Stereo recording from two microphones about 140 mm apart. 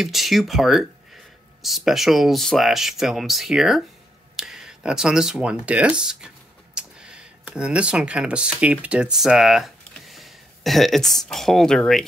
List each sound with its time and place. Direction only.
0.0 s speech: centre (ahead or behind)